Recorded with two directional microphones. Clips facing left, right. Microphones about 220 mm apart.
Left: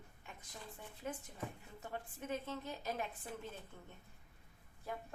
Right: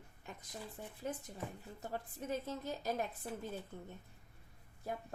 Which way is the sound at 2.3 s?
40° right (ahead or behind).